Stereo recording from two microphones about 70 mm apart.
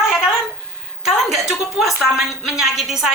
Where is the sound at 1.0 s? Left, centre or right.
Centre.